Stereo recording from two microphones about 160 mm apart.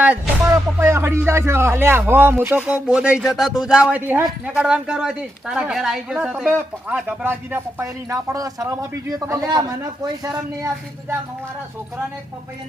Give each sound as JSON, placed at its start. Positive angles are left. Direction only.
{"t": 0.0, "sound": "a man's voice", "side_deg": -10}